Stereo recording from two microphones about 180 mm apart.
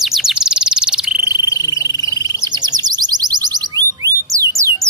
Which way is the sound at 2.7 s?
20° right (ahead or behind).